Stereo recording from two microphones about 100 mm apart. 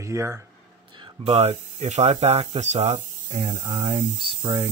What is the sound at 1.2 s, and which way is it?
Speech, 90° right.